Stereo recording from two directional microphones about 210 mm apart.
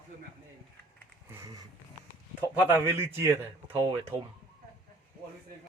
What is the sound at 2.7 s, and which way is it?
Speech, 10° right (ahead or behind).